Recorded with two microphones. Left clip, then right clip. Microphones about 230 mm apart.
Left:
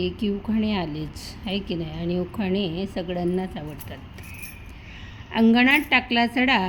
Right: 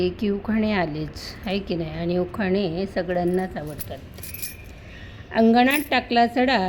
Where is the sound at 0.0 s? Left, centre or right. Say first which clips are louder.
Right 3 dB; centre.